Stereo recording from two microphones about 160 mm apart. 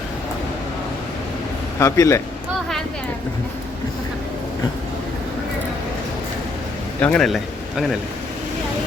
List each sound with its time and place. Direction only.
1.8 s a man's voice: 20° left (ahead or behind)
7.0 s speech: 5° left (ahead or behind)